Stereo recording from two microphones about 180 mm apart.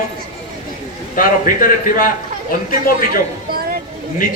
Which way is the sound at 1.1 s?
50° left (ahead or behind).